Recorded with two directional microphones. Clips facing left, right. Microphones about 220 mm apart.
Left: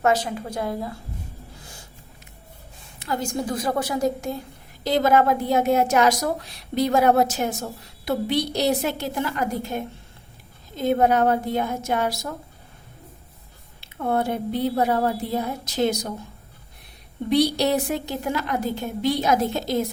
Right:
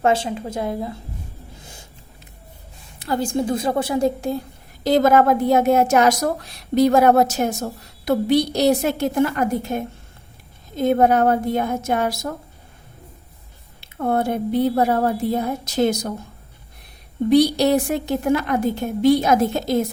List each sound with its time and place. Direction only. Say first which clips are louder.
0.0 s a woman's voice: right 2 dB; 25° right (ahead or behind)
3.0 s a woman's voice: right 5 dB; 35° right (ahead or behind)
4.8 s a woman's voice: right 4 dB; 50° right (ahead or behind)
10.8 s a woman's voice: right 3 dB; 50° right (ahead or behind)
14.0 s a woman's voice: right 3 dB; 50° right (ahead or behind)
17.2 s a woman's voice: right 5 dB; 50° right (ahead or behind)